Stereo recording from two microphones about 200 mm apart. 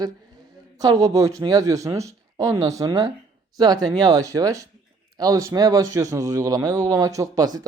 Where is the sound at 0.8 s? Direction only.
15° right (ahead or behind).